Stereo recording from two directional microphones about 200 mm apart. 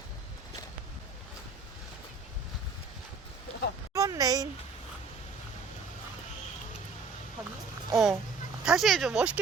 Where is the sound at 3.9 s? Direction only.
15° right (ahead or behind).